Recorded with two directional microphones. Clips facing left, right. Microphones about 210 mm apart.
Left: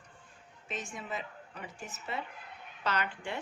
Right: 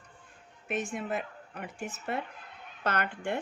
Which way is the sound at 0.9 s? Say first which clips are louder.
Right 6 dB; 55° right (ahead or behind).